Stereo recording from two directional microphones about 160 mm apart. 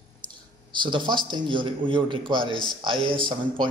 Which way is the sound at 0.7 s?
30° right (ahead or behind).